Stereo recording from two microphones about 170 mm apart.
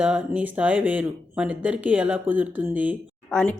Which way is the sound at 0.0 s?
10° right (ahead or behind).